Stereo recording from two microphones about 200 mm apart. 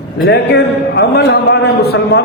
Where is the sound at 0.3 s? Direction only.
55° left (ahead or behind).